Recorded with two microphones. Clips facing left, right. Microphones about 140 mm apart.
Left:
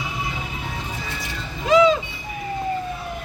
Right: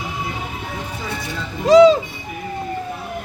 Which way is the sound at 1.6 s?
35° right (ahead or behind).